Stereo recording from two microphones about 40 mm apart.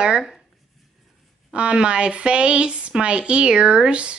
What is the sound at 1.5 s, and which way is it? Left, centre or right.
Speech, right.